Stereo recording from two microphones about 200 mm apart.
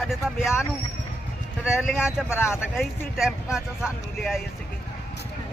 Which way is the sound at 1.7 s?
Centre (ahead or behind).